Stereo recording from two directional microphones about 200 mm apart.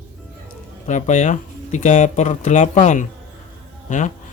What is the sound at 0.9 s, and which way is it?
Speech, 35° left (ahead or behind).